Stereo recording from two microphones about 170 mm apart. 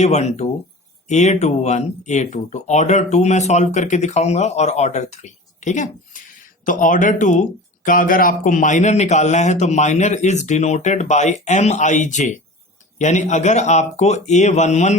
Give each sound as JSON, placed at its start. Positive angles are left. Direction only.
{"t": 0.0, "sound": "speech", "side_deg": 40}